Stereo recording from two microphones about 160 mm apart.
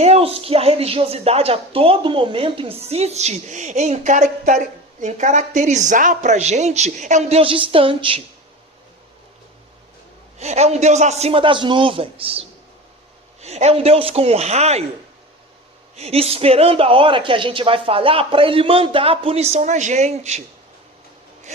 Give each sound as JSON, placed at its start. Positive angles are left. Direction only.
{"t": 0.0, "sound": "speech", "side_deg": -40}
{"t": 10.3, "sound": "speech", "side_deg": -45}
{"t": 16.0, "sound": "speech", "side_deg": -40}